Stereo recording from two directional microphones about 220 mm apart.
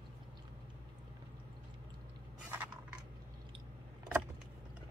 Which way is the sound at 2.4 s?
10° right (ahead or behind).